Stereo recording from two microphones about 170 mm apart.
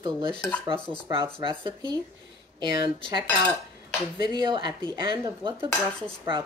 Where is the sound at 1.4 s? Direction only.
30° right (ahead or behind).